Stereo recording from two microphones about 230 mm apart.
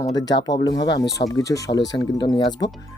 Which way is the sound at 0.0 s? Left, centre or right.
Centre.